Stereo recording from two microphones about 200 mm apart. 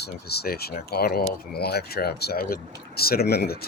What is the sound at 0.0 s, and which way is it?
Speech, 55° left (ahead or behind).